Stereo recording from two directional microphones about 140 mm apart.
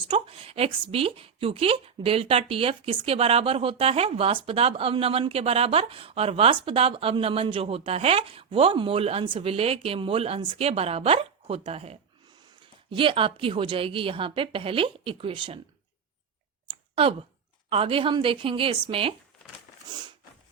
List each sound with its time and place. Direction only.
0.0 s a woman's voice: 40° right (ahead or behind)
16.9 s a woman's voice: 40° right (ahead or behind)